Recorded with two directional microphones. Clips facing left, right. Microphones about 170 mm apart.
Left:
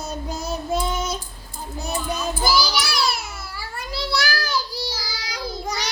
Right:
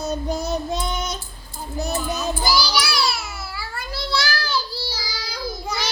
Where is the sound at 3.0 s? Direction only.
50° left (ahead or behind).